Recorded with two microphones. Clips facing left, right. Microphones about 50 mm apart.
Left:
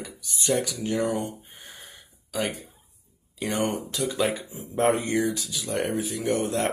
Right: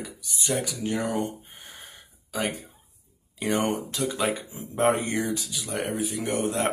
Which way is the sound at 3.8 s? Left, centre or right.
Right.